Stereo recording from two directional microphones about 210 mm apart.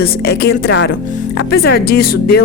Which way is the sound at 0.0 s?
50° left (ahead or behind).